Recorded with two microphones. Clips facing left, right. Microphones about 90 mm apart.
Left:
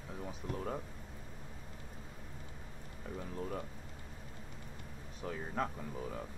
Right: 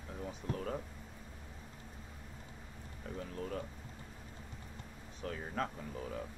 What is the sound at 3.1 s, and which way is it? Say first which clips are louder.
Speech: even; 10° left (ahead or behind).